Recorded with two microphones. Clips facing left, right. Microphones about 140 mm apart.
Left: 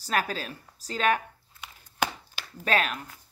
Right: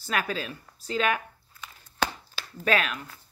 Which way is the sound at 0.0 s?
35° left (ahead or behind).